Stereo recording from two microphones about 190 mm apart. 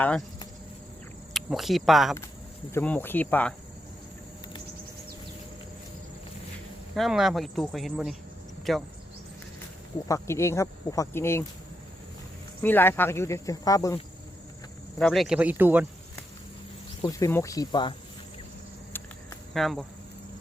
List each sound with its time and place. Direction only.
1.3 s speech: centre (ahead or behind)
6.9 s speech: centre (ahead or behind)
10.1 s speech: 15° left (ahead or behind)
12.6 s speech: 10° left (ahead or behind)
14.9 s speech: centre (ahead or behind)
17.0 s speech: 15° left (ahead or behind)
19.5 s speech: centre (ahead or behind)